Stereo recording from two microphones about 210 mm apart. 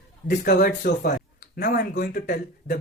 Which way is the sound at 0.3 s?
40° left (ahead or behind).